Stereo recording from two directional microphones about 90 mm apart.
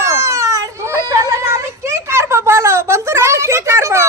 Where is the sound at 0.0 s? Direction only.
30° right (ahead or behind).